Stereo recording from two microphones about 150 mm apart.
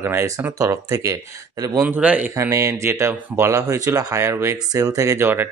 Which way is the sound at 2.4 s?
20° right (ahead or behind).